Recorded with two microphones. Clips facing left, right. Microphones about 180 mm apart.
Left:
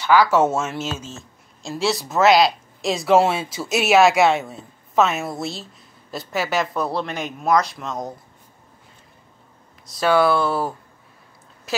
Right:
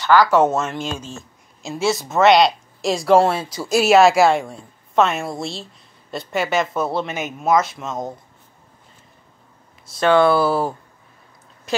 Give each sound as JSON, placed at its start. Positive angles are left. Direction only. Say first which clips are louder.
{"t": 0.0, "sound": "speech", "louder": "right 2 dB", "side_deg": 10}
{"t": 9.9, "sound": "speech", "louder": "right 3 dB", "side_deg": 5}